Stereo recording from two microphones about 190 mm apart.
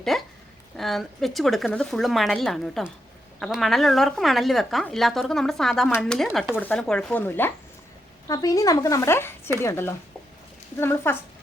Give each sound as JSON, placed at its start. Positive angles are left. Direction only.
{"t": 0.1, "sound": "a woman's voice", "side_deg": 0}